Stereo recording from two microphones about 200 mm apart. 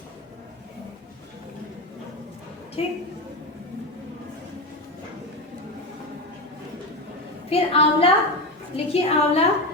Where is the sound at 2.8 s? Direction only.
30° left (ahead or behind).